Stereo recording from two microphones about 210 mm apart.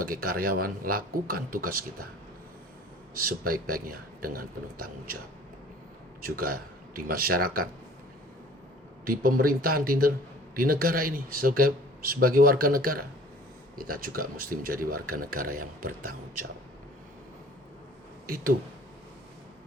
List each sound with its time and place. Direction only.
0.0 s speech: 45° right (ahead or behind)
3.2 s speech: 45° right (ahead or behind)
6.4 s speech: 45° right (ahead or behind)
9.0 s speech: 45° right (ahead or behind)
15.4 s speech: 90° right